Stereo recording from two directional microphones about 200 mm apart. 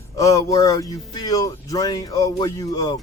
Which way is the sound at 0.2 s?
15° left (ahead or behind).